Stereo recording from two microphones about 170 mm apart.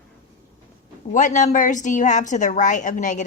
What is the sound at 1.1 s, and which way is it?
A woman's voice, 50° left (ahead or behind).